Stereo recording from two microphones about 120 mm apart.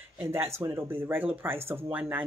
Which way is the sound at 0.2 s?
20° right (ahead or behind).